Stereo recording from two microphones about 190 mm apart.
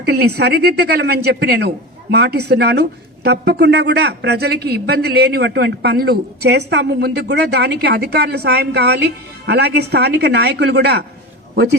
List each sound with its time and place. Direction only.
0.0 s speech: 55° right (ahead or behind)